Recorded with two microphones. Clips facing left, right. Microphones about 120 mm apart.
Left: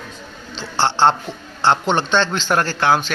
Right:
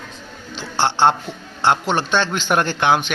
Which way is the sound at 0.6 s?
15° right (ahead or behind).